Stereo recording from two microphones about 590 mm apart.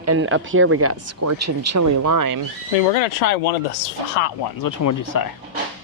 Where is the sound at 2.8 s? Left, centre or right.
Left.